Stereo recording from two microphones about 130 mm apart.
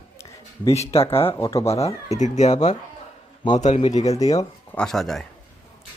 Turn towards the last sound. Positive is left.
turn(degrees=0)  # may be behind; listen again after turning